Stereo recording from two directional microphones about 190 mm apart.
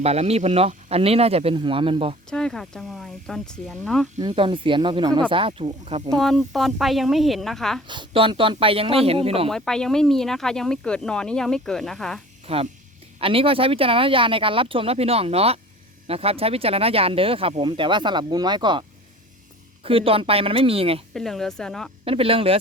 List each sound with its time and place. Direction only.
0.0 s speech: 35° right (ahead or behind)
2.3 s speech: 5° left (ahead or behind)
4.2 s speech: 25° right (ahead or behind)
6.1 s speech: centre (ahead or behind)
7.9 s speech: 25° right (ahead or behind)
9.5 s speech: 5° left (ahead or behind)
12.5 s speech: 30° right (ahead or behind)
21.1 s speech: centre (ahead or behind)
22.0 s speech: 30° right (ahead or behind)